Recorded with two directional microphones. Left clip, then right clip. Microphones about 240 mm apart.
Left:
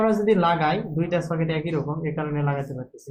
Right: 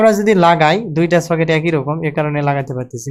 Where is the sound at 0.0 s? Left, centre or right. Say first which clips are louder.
Right 9 dB; right.